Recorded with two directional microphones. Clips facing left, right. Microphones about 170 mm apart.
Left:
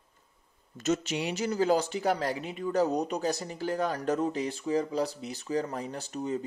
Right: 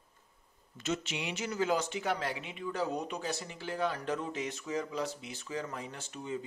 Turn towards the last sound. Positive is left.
turn(degrees=40)  # may be behind; listen again after turning